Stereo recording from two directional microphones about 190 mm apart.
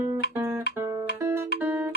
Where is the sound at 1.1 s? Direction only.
10° right (ahead or behind).